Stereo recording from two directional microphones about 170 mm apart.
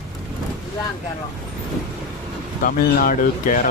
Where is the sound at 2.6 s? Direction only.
55° left (ahead or behind).